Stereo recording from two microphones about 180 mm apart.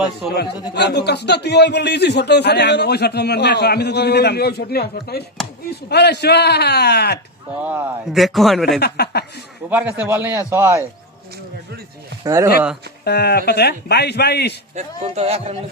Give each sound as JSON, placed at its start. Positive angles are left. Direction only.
{"t": 0.7, "sound": "a man's voice", "side_deg": 65}
{"t": 7.6, "sound": "a man's voice", "side_deg": -10}
{"t": 8.1, "sound": "a man's voice", "side_deg": 0}
{"t": 8.8, "sound": "a man's voice", "side_deg": 65}
{"t": 9.6, "sound": "a man's voice", "side_deg": -10}
{"t": 12.2, "sound": "speech", "side_deg": -15}
{"t": 13.1, "sound": "a man's voice", "side_deg": 65}
{"t": 14.8, "sound": "speech", "side_deg": -35}